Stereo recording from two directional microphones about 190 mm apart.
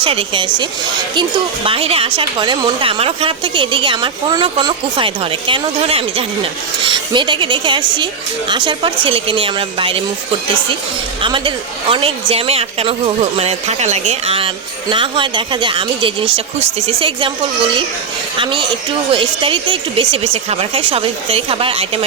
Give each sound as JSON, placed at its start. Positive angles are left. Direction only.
{"t": 0.0, "sound": "a woman's voice", "side_deg": -30}
{"t": 11.2, "sound": "a woman's voice", "side_deg": -25}
{"t": 19.1, "sound": "a woman's voice", "side_deg": -25}